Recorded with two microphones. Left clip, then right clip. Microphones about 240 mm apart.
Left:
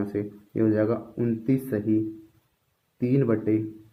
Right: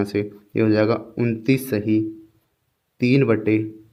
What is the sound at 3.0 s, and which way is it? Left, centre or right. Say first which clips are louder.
Speech: right 6 dB; right.